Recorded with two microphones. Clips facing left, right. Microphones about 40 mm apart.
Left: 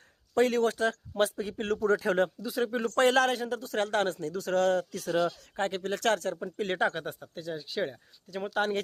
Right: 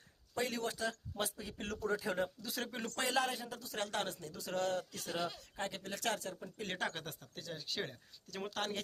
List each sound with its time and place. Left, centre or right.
0.3 s speech: left
1.8 s speech: left
2.4 s speech: centre
2.9 s speech: left
5.4 s speech: left
6.7 s speech: centre
8.4 s speech: left